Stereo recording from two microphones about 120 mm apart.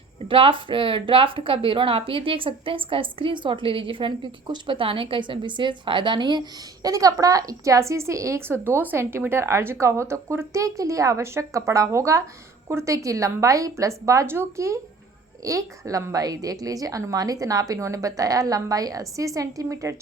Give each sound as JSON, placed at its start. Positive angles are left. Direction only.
{"t": 0.3, "sound": "a woman's voice", "side_deg": -45}